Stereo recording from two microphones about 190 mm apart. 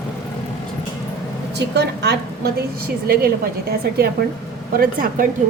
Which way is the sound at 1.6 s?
60° right (ahead or behind).